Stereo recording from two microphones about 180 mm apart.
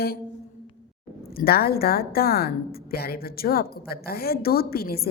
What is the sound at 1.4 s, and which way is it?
A woman's voice, 60° left (ahead or behind).